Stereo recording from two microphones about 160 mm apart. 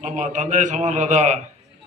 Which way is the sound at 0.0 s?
50° right (ahead or behind).